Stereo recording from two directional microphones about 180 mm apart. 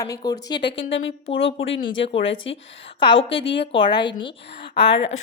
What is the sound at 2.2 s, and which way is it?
Speech, 90° left.